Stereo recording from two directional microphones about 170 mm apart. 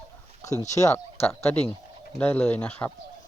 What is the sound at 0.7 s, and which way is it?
Speech, 20° left (ahead or behind).